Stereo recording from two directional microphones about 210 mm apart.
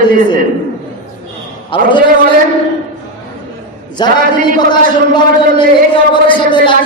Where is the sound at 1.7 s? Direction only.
25° left (ahead or behind).